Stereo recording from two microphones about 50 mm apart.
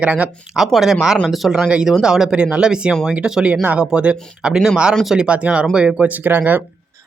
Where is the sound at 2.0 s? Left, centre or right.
Centre.